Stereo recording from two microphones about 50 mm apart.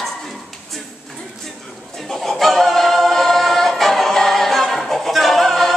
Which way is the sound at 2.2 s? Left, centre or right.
Centre.